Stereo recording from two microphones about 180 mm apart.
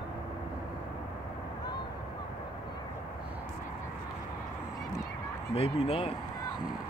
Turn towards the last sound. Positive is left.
turn(degrees=35)  # may be behind; listen again after turning